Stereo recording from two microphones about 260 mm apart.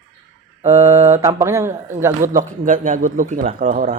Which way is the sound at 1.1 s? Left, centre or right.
Centre.